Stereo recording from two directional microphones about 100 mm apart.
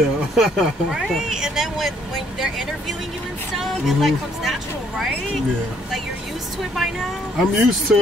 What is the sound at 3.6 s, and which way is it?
Speech, centre (ahead or behind).